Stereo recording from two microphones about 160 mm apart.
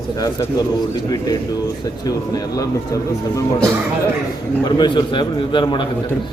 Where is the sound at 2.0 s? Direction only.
20° left (ahead or behind).